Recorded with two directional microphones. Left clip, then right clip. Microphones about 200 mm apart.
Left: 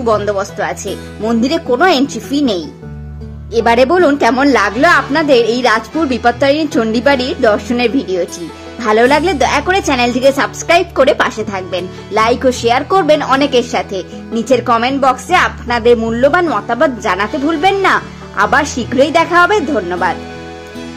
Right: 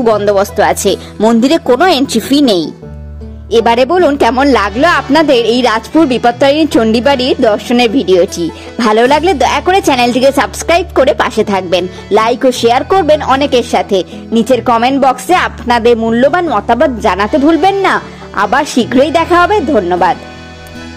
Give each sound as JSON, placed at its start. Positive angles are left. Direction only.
{"t": 0.0, "sound": "a woman's voice", "side_deg": -40}